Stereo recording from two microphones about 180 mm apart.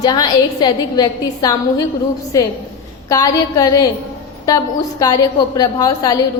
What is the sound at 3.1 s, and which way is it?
Speech, 20° left (ahead or behind).